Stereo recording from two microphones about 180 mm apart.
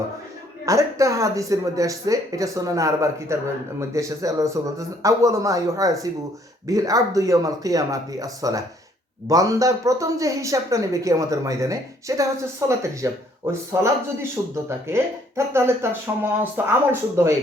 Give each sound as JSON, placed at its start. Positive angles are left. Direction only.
{"t": 0.6, "sound": "speech", "side_deg": -15}